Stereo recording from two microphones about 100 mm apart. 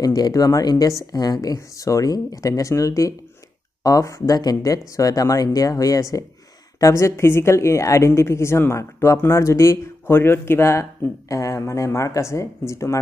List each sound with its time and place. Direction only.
0.0 s speech: 40° left (ahead or behind)